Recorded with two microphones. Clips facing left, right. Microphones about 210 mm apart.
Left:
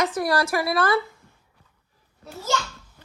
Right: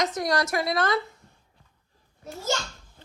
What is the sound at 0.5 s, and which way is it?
Speech, 20° right (ahead or behind).